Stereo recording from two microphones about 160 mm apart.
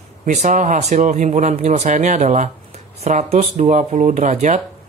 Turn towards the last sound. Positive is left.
turn(degrees=-50)  # may be behind; listen again after turning